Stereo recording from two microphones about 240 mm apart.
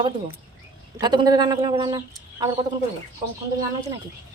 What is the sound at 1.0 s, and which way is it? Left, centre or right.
Speech, centre.